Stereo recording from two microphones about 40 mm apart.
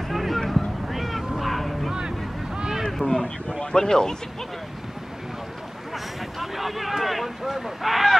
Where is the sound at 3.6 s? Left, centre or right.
Centre.